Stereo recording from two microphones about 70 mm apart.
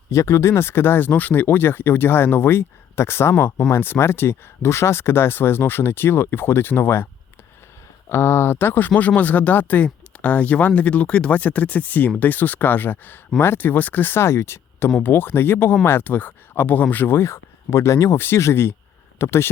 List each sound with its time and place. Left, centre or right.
0.1 s speech: left
8.1 s speech: left
17.2 s speech: left